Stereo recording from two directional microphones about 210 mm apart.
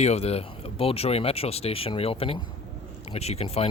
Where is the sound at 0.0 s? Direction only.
30° left (ahead or behind).